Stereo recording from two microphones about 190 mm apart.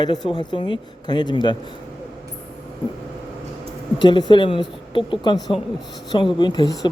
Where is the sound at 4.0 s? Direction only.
25° left (ahead or behind).